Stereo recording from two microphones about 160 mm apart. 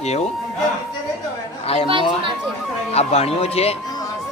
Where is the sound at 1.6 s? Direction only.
40° left (ahead or behind).